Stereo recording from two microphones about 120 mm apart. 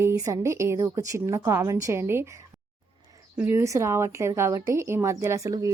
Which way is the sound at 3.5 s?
25° right (ahead or behind).